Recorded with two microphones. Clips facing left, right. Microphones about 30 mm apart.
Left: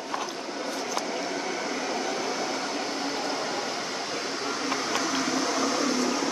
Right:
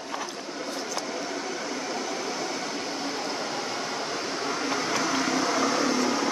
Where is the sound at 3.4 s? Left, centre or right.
Centre.